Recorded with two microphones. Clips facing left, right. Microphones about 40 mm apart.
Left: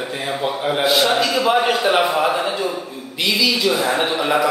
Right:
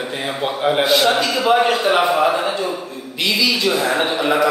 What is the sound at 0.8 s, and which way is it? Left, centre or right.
Speech, centre.